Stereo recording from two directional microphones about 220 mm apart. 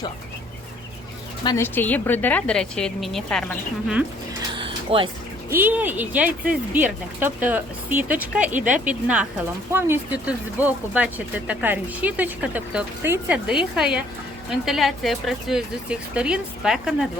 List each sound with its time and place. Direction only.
1.5 s a woman's voice: 10° left (ahead or behind)
4.5 s a sound: 25° right (ahead or behind)
5.5 s speech: 10° right (ahead or behind)